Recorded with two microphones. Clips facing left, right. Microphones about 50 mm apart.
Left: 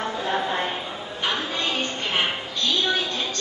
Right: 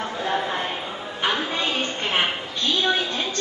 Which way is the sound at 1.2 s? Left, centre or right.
Centre.